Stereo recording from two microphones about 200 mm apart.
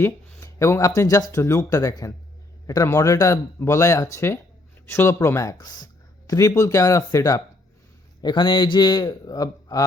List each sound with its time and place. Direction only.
0.0 s a man's voice: 15° left (ahead or behind)